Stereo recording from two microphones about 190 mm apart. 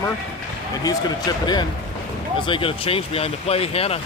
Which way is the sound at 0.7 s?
20° left (ahead or behind).